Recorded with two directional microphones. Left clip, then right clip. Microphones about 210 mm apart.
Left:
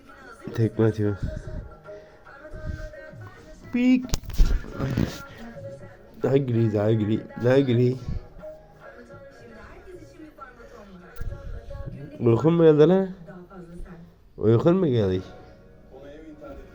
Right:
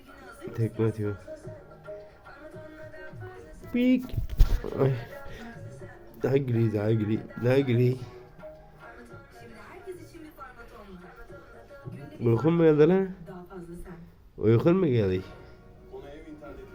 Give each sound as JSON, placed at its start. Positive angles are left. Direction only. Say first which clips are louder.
{"t": 0.5, "sound": "speech", "louder": "left 6 dB", "side_deg": 30}
{"t": 3.7, "sound": "speech", "louder": "left 3 dB", "side_deg": -10}
{"t": 4.7, "sound": "speech", "louder": "right 5 dB", "side_deg": -30}
{"t": 6.2, "sound": "speech", "louder": "left 4 dB", "side_deg": 5}
{"t": 12.2, "sound": "speech", "louder": "left 5 dB", "side_deg": 10}
{"t": 14.3, "sound": "speech", "louder": "left 3 dB", "side_deg": 0}